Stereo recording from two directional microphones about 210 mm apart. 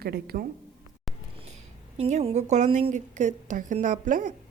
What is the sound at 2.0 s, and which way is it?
A woman's voice, 30° right (ahead or behind).